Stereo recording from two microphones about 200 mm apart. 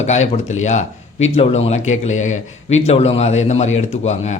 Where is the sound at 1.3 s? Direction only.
30° left (ahead or behind).